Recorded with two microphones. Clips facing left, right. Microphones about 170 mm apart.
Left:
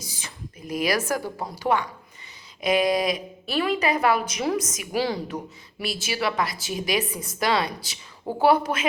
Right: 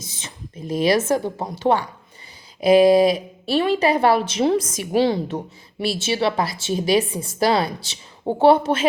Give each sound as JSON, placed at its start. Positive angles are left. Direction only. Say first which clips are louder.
{"t": 0.0, "sound": "a woman's voice", "louder": "right 1 dB", "side_deg": -25}